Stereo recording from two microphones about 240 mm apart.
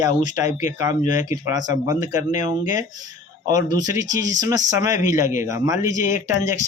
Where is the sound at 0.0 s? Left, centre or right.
Centre.